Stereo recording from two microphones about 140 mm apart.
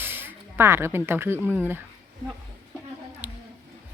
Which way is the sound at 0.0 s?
15° right (ahead or behind).